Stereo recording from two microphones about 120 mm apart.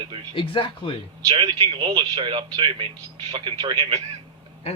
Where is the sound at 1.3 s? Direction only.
45° right (ahead or behind).